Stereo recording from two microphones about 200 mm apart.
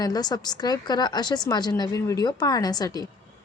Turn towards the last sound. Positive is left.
turn(degrees=20)  # may be behind; listen again after turning